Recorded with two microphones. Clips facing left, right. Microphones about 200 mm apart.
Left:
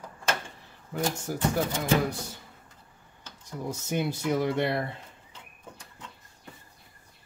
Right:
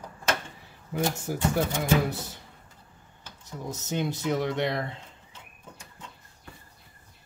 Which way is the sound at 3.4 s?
10° left (ahead or behind).